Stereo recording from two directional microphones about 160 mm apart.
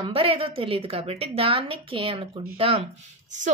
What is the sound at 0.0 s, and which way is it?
A woman's voice, 35° right (ahead or behind).